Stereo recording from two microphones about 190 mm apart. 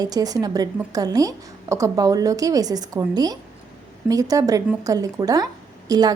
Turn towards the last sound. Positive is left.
turn(degrees=-20)  # may be behind; listen again after turning